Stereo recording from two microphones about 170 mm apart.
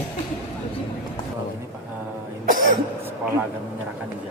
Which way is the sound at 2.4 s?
50° right (ahead or behind).